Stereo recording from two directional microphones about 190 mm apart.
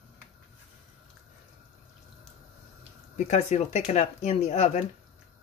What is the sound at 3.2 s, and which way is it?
Speech, 40° left (ahead or behind).